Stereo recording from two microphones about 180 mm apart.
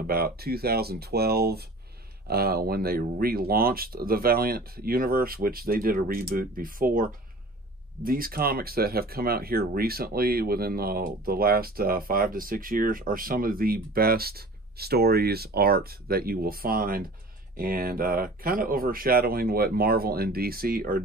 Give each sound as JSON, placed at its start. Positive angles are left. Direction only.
{"t": 0.0, "sound": "speech", "side_deg": -55}